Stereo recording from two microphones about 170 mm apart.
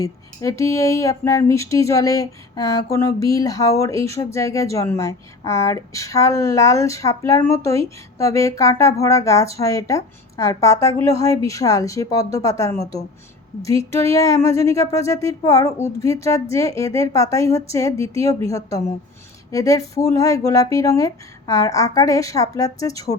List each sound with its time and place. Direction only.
0.0 s speech: 20° left (ahead or behind)